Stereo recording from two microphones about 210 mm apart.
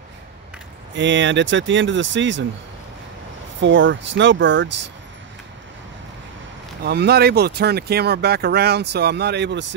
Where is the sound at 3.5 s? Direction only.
60° right (ahead or behind).